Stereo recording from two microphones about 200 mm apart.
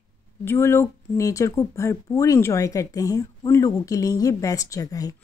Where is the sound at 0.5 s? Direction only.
15° left (ahead or behind).